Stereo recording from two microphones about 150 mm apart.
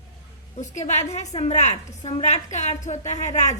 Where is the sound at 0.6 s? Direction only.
50° left (ahead or behind).